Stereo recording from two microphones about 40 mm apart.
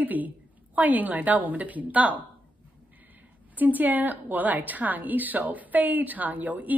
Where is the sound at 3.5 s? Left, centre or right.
Right.